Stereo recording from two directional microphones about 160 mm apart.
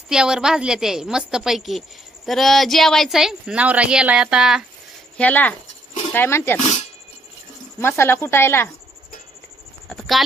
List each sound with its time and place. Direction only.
0.1 s a woman's voice: 5° right (ahead or behind)
5.1 s a woman's voice: 10° left (ahead or behind)
7.8 s a woman's voice: 15° left (ahead or behind)
9.8 s speech: centre (ahead or behind)